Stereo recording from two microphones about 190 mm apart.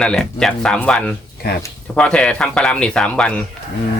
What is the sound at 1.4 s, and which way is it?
Speech, 55° left (ahead or behind).